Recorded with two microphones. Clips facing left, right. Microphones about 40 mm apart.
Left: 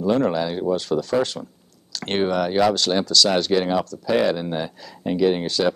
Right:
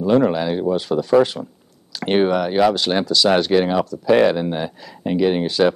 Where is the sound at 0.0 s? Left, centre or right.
Centre.